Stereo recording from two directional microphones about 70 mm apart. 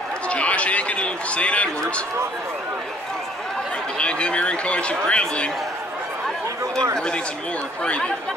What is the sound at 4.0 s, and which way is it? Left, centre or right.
Speech, centre.